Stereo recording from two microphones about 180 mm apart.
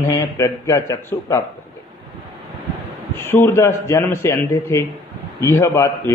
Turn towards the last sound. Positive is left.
turn(degrees=15)  # may be behind; listen again after turning